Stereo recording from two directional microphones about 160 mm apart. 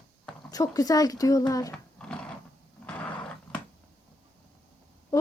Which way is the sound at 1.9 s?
5° left (ahead or behind).